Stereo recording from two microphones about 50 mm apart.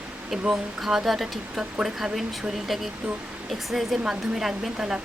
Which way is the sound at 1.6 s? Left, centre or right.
Centre.